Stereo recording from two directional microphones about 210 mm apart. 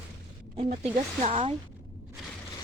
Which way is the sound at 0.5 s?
30° right (ahead or behind).